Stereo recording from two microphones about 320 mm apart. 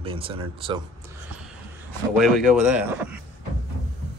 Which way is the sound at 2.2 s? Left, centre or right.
Centre.